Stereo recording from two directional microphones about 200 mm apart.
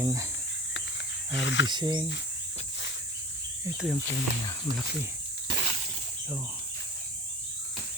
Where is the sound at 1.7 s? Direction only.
20° right (ahead or behind).